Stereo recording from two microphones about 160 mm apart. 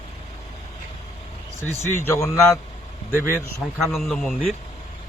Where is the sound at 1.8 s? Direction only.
15° left (ahead or behind).